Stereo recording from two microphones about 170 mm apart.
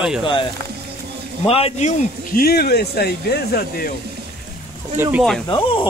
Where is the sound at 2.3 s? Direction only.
65° left (ahead or behind).